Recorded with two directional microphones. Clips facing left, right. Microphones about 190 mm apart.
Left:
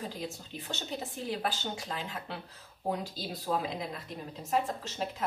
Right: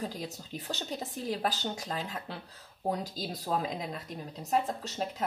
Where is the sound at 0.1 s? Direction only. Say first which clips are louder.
Even; 40° right (ahead or behind).